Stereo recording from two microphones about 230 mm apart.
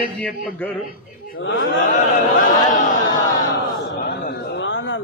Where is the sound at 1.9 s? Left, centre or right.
Left.